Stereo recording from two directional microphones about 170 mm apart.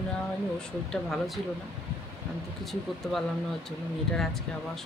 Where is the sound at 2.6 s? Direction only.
Centre (ahead or behind).